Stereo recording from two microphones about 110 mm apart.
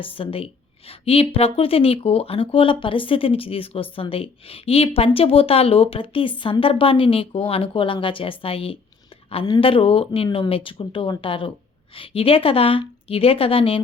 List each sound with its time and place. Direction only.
0.0 s a woman's voice: 55° left (ahead or behind)